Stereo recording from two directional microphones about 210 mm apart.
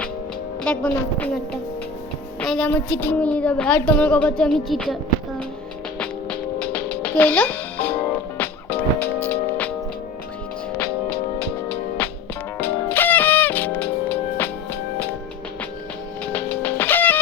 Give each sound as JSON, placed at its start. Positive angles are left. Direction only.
{"t": 0.6, "sound": "a woman's voice", "side_deg": 5}
{"t": 2.4, "sound": "a woman's voice", "side_deg": 5}
{"t": 6.6, "sound": "music", "side_deg": 5}
{"t": 11.1, "sound": "music", "side_deg": 50}
{"t": 12.0, "sound": "music", "side_deg": 10}
{"t": 16.3, "sound": "music", "side_deg": 10}